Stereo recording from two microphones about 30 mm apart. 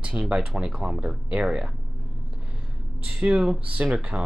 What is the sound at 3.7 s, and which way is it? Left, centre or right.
Speech, right.